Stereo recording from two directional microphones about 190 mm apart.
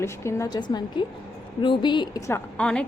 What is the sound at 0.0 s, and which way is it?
A woman's voice, 15° left (ahead or behind).